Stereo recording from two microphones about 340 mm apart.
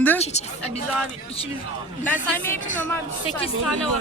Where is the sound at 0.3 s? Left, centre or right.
Centre.